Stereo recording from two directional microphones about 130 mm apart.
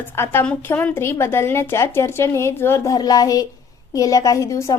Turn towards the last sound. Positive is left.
turn(degrees=25)  # may be behind; listen again after turning